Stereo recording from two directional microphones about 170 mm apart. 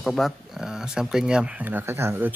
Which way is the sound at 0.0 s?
Centre (ahead or behind).